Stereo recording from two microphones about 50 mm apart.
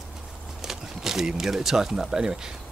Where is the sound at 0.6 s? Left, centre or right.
Centre.